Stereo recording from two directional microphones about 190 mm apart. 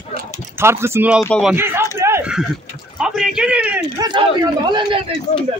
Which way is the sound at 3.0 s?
5° right (ahead or behind).